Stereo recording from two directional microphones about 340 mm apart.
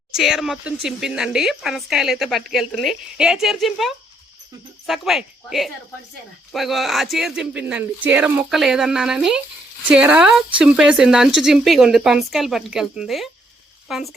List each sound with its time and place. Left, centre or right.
0.1 s speech: centre